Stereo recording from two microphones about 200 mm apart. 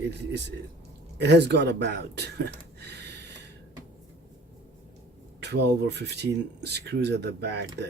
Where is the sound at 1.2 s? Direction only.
60° right (ahead or behind).